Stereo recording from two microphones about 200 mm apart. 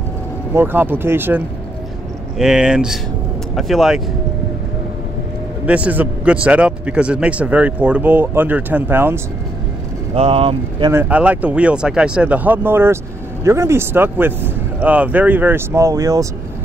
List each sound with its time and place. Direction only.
0.5 s a man's voice: 10° right (ahead or behind)
5.7 s a man's voice: 5° right (ahead or behind)
10.1 s speech: 30° right (ahead or behind)
10.9 s a man's voice: 10° right (ahead or behind)